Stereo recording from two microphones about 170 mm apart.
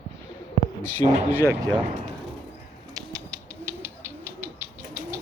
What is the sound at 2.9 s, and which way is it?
Bird, 20° right (ahead or behind).